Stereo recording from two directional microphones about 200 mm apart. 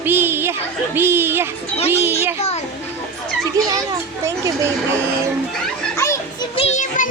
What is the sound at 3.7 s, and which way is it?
Speech, 15° right (ahead or behind).